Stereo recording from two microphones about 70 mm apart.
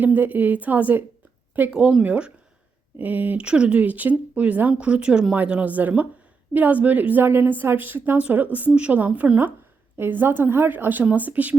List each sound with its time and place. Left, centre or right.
0.0 s a woman's voice: right
1.7 s speech: centre
3.0 s a woman's voice: right
3.4 s a woman's voice: centre